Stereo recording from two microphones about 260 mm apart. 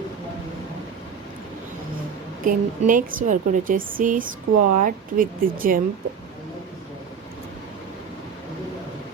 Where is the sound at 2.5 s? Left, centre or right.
Right.